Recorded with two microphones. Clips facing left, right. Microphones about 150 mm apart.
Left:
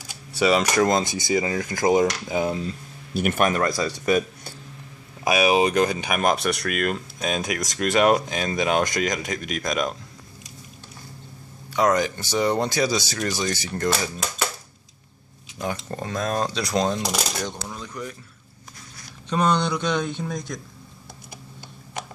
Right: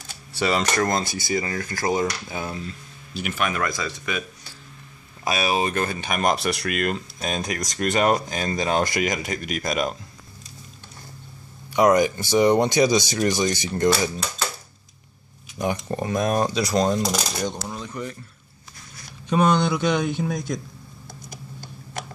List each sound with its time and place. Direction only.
0.0 s speech: 10° left (ahead or behind)
3.2 s speech: 50° left (ahead or behind)
3.5 s speech: 35° left (ahead or behind)
5.2 s speech: 15° left (ahead or behind); by 9.9 s 5° right (ahead or behind)
11.7 s speech: 15° right (ahead or behind)
15.6 s speech: 15° right (ahead or behind)
17.4 s coin: 20° right (ahead or behind)
19.2 s speech: 10° right (ahead or behind)